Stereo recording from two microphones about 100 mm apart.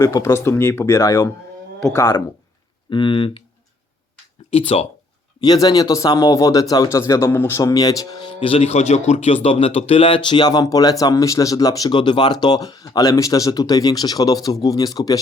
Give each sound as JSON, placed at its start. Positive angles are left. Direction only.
{"t": 0.0, "sound": "speech", "side_deg": 30}
{"t": 2.9, "sound": "speech", "side_deg": 55}
{"t": 4.5, "sound": "speech", "side_deg": 90}
{"t": 5.4, "sound": "speech", "side_deg": 40}
{"t": 7.6, "sound": "speech", "side_deg": 35}
{"t": 10.2, "sound": "speech", "side_deg": 45}
{"t": 11.9, "sound": "speech", "side_deg": 50}